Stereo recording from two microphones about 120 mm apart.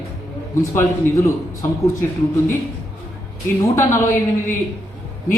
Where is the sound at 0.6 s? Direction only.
25° left (ahead or behind).